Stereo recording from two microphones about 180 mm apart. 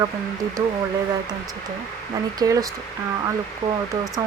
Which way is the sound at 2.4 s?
20° right (ahead or behind).